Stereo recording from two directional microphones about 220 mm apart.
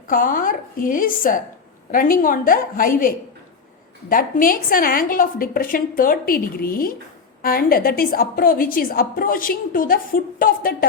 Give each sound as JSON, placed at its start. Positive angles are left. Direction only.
{"t": 0.1, "sound": "a woman's voice", "side_deg": 40}
{"t": 4.1, "sound": "a woman's voice", "side_deg": 40}